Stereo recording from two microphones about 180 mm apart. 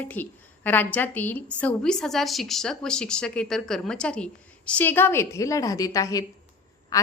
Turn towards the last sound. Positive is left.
turn(degrees=20)  # may be behind; listen again after turning